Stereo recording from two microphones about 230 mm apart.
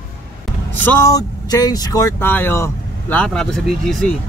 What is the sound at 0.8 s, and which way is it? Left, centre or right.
Speech, centre.